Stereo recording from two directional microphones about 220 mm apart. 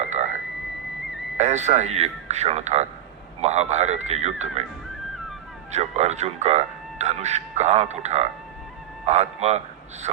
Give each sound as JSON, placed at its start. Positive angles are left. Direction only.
{"t": 0.0, "sound": "a sound", "side_deg": -30}
{"t": 1.4, "sound": "speech", "side_deg": -30}
{"t": 5.7, "sound": "a man's voice", "side_deg": -30}